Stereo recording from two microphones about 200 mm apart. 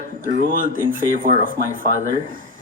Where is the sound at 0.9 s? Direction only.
45° right (ahead or behind).